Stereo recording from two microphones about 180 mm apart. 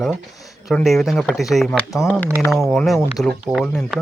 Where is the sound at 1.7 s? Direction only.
15° left (ahead or behind).